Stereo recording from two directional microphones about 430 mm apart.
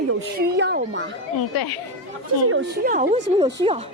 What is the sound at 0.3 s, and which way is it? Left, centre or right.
Speech, right.